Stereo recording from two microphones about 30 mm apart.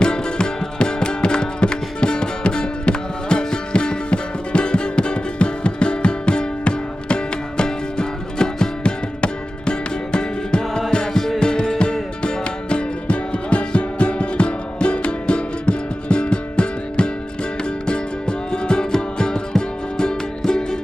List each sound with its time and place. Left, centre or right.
0.0 s music: left
8.8 s music: left